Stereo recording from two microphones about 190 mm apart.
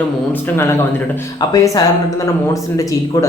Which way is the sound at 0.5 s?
10° left (ahead or behind).